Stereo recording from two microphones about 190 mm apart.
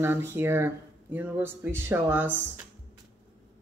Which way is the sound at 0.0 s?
10° right (ahead or behind).